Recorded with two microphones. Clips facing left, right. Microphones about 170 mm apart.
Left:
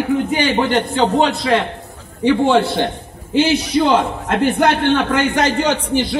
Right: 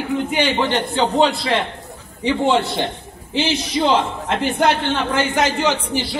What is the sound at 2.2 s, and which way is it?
A man's voice, 55° left (ahead or behind).